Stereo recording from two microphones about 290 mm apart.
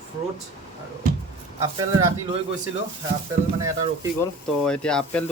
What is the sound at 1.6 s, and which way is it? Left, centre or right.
Speech, centre.